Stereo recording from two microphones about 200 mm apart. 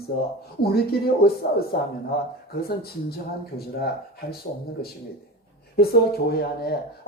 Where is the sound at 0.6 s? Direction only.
50° left (ahead or behind).